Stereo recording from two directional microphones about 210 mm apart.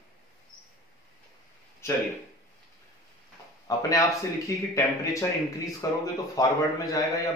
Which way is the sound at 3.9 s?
15° left (ahead or behind).